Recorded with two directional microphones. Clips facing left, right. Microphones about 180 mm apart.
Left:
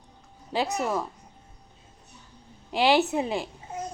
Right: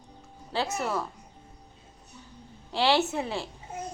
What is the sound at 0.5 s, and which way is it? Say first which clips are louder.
Speech: left 3 dB; 15° left (ahead or behind).